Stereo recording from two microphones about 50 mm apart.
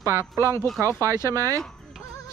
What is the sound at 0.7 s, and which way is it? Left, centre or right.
Speech, right.